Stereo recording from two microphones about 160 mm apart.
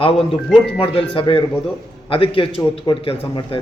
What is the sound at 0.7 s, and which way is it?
Speech, 35° left (ahead or behind).